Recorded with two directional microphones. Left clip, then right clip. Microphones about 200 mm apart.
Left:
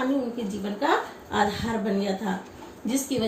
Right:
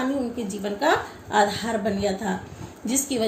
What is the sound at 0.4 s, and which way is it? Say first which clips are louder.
A woman's voice: right 6 dB; 55° right (ahead or behind).